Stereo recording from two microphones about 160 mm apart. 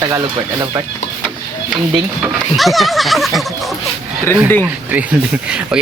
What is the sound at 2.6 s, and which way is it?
Speech, centre (ahead or behind).